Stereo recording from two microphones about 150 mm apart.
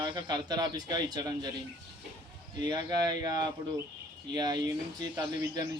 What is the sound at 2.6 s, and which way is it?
Speech, 25° right (ahead or behind).